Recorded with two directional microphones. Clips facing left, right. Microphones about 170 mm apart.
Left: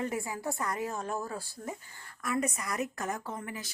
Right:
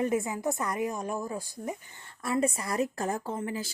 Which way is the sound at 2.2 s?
30° right (ahead or behind).